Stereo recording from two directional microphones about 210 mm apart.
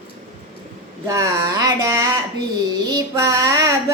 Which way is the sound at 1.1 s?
15° right (ahead or behind).